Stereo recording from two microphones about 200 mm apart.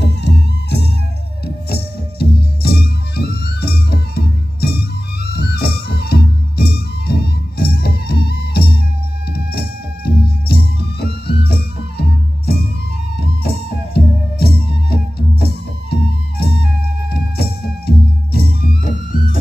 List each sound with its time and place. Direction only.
0.0 s music: 55° left (ahead or behind)